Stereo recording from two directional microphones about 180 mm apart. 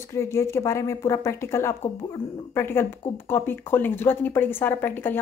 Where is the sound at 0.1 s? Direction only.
15° left (ahead or behind).